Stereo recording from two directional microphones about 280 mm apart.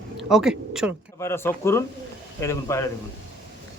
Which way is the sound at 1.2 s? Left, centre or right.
Centre.